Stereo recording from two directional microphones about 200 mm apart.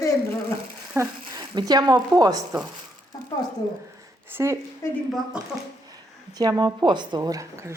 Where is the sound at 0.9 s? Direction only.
20° right (ahead or behind).